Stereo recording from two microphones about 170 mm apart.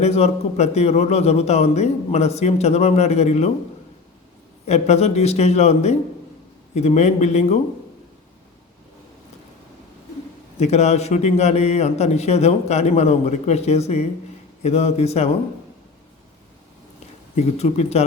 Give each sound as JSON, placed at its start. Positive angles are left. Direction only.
{"t": 0.0, "sound": "a man's voice", "side_deg": 40}
{"t": 4.6, "sound": "a man's voice", "side_deg": 40}
{"t": 10.6, "sound": "a man's voice", "side_deg": 40}
{"t": 17.3, "sound": "a man's voice", "side_deg": 40}